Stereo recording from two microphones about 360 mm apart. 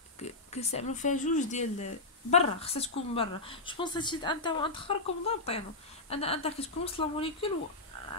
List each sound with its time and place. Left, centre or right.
0.2 s a woman's voice: centre